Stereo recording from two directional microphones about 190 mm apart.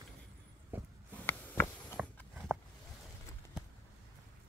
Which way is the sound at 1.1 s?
10° left (ahead or behind).